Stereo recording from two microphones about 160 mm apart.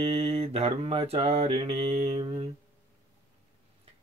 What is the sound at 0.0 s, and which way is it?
Mantra, 40° right (ahead or behind).